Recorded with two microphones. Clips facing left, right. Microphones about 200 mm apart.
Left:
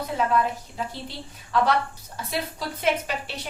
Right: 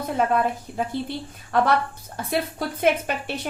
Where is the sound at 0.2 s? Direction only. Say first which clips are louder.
Right 2 dB; 50° right (ahead or behind).